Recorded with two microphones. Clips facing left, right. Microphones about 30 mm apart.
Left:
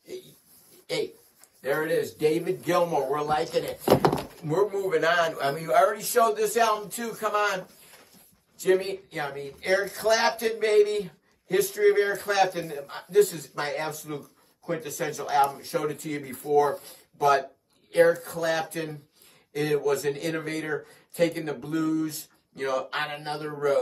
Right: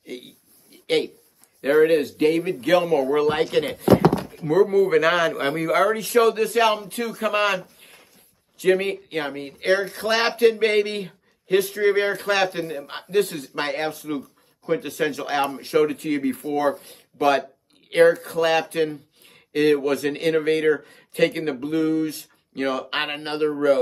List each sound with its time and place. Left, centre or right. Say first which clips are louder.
0.0 s a sound: right 4 dB; right
0.8 s a man's voice: right 7 dB; right
8.5 s speech: right 4 dB; right
9.6 s speech: right 4 dB; right
11.4 s speech: right 2 dB; right
13.0 s speech: left 1 dB; right